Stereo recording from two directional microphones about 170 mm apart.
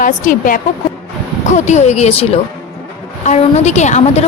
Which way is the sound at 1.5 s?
45° left (ahead or behind).